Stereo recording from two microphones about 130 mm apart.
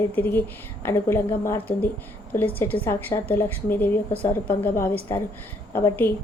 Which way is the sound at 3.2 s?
15° left (ahead or behind).